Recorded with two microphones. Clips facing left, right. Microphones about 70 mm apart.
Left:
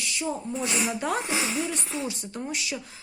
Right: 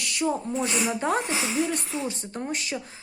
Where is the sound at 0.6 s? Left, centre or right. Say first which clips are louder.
Right 2 dB; right.